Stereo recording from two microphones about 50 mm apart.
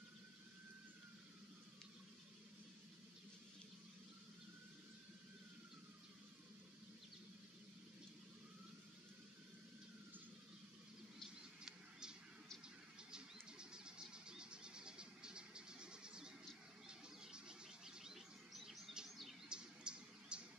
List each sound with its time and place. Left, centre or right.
11.2 s mouse: centre
13.1 s a sound: centre
16.8 s bird: centre
19.0 s bird vocalization: centre
19.5 s bird: centre